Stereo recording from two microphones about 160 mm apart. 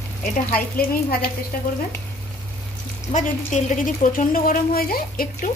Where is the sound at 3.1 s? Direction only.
50° left (ahead or behind); by 5.5 s 65° left (ahead or behind).